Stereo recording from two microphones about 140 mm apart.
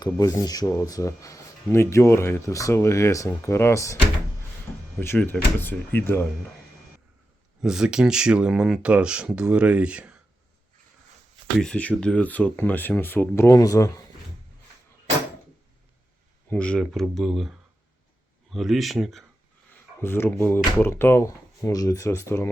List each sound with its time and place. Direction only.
0.0 s speech: 25° left (ahead or behind)
4.9 s speech: 15° left (ahead or behind)
7.6 s speech: 5° right (ahead or behind)
11.6 s speech: 10° left (ahead or behind); by 14.0 s 25° left (ahead or behind)
16.5 s speech: 10° left (ahead or behind)
18.5 s speech: centre (ahead or behind)
20.0 s speech: 15° left (ahead or behind)